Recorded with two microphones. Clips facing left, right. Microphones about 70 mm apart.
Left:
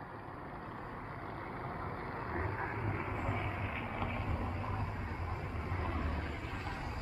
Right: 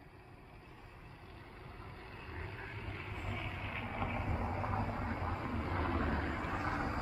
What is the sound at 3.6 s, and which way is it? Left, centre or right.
Vehicle, centre.